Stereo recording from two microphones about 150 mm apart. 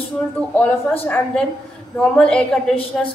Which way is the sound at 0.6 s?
10° left (ahead or behind).